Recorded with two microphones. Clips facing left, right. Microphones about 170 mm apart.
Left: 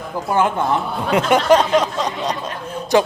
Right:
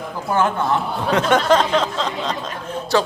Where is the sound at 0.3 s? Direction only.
15° left (ahead or behind).